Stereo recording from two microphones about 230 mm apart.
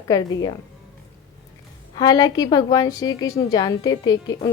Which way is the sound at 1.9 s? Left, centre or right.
Centre.